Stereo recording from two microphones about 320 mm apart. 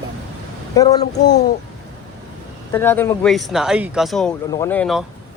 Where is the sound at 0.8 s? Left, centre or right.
Centre.